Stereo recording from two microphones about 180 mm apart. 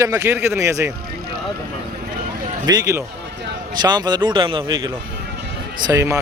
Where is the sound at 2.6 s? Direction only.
20° right (ahead or behind).